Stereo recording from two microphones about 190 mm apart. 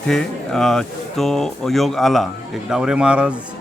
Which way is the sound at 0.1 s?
Centre (ahead or behind).